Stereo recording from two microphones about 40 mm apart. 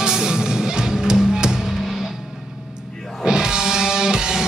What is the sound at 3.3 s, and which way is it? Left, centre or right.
Music, centre.